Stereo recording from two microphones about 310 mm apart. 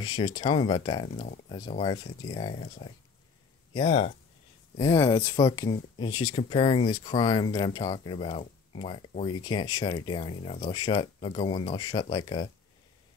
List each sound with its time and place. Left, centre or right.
0.0 s speech: centre